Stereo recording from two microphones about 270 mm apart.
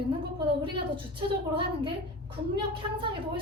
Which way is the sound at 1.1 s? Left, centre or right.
Centre.